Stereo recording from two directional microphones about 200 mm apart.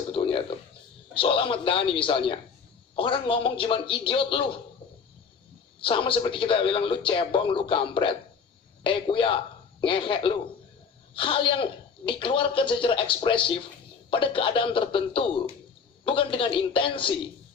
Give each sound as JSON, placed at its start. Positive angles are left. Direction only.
{"t": 0.1, "sound": "a sound", "side_deg": 25}
{"t": 1.1, "sound": "speech", "side_deg": 25}
{"t": 5.8, "sound": "speech", "side_deg": 25}